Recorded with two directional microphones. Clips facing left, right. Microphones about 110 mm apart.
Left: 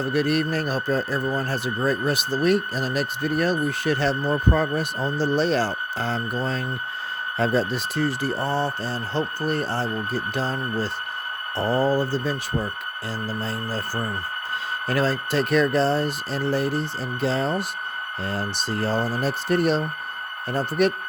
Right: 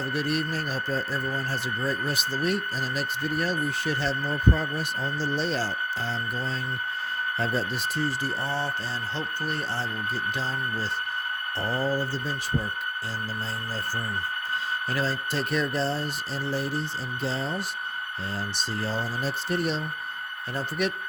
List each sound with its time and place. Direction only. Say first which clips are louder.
0.0 s speech: left 6 dB; 55° left (ahead or behind)
7.3 s speech: left 8 dB; 90° left; by 20.9 s 45° left (ahead or behind)